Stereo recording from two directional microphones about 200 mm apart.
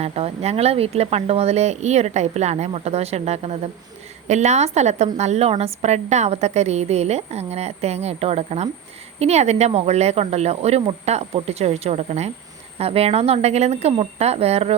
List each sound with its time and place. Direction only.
0.0 s a woman's voice: 30° right (ahead or behind)